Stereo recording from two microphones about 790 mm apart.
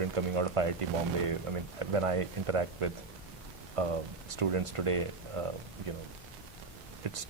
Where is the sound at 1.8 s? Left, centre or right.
Right.